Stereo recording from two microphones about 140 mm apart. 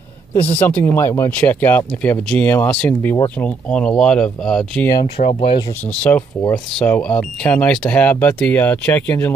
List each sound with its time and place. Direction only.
0.6 s speech: 10° left (ahead or behind)
5.2 s speech: 55° left (ahead or behind)
6.0 s speech: 15° left (ahead or behind)